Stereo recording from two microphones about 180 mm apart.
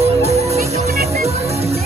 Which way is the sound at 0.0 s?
35° right (ahead or behind).